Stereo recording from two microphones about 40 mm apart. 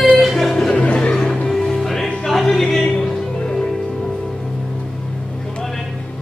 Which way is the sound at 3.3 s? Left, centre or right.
Centre.